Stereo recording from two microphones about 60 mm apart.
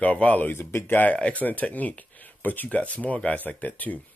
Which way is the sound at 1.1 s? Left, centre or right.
Left.